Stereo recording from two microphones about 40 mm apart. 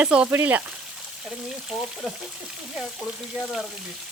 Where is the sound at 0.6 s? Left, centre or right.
Centre.